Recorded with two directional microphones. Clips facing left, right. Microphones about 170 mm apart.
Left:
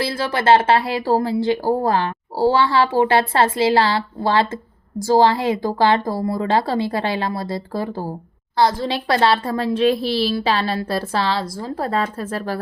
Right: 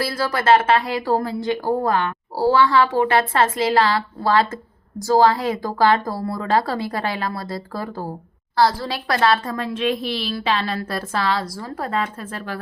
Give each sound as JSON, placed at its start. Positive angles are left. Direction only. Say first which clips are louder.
{"t": 0.0, "sound": "a woman's voice", "louder": "left 1 dB", "side_deg": 25}